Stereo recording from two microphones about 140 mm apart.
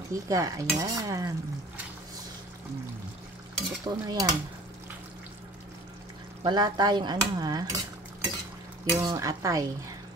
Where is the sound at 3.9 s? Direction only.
25° right (ahead or behind).